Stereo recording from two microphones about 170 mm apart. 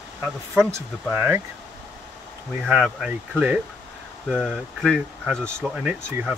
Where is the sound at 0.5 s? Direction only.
10° right (ahead or behind).